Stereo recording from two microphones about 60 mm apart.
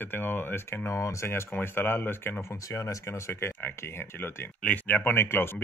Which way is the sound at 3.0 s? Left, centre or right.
Left.